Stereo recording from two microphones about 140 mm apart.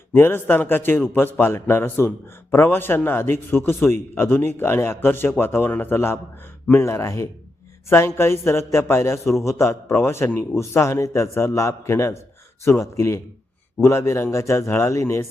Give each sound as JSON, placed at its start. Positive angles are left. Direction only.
{"t": 0.1, "sound": "a man's voice", "side_deg": 15}
{"t": 9.1, "sound": "a man's voice", "side_deg": 0}
{"t": 9.4, "sound": "a man's voice", "side_deg": 20}